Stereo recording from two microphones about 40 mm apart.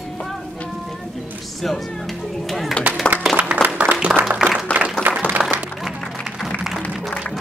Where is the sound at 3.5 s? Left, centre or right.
Right.